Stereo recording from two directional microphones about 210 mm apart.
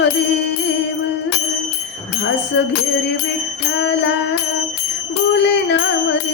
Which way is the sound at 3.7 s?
55° left (ahead or behind).